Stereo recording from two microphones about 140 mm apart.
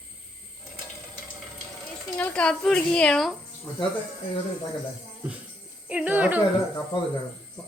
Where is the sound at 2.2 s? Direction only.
10° left (ahead or behind).